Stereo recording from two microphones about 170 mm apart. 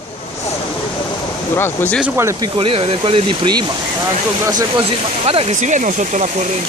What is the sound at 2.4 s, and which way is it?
Speech, 35° right (ahead or behind).